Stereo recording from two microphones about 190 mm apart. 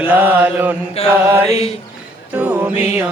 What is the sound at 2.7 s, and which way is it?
Music, 30° left (ahead or behind).